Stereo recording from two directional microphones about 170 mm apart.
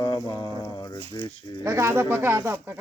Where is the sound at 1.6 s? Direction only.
15° right (ahead or behind).